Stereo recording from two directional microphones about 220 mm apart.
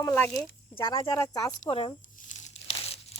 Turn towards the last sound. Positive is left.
turn(degrees=25)  # may be behind; listen again after turning